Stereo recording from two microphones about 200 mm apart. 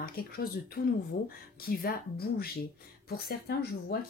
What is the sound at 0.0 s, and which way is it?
Speech, 50° left (ahead or behind).